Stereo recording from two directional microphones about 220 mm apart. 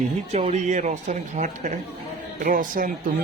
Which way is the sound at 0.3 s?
30° right (ahead or behind).